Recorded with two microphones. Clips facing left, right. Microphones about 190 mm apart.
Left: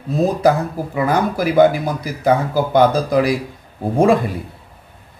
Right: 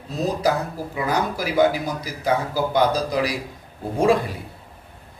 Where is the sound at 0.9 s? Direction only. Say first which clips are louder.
Left 6 dB; 55° left (ahead or behind).